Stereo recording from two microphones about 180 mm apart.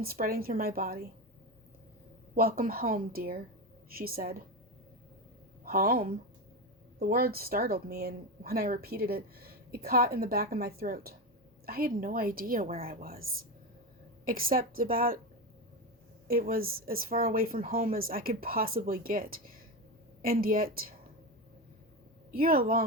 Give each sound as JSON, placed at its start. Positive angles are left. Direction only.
{"t": 0.0, "sound": "speech", "side_deg": -55}
{"t": 2.3, "sound": "speech", "side_deg": -55}
{"t": 5.6, "sound": "speech", "side_deg": -55}
{"t": 14.3, "sound": "speech", "side_deg": -55}
{"t": 16.2, "sound": "speech", "side_deg": -55}
{"t": 22.3, "sound": "speech", "side_deg": -55}